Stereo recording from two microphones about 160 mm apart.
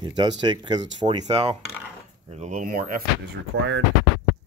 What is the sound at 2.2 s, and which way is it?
Speech, 45° right (ahead or behind).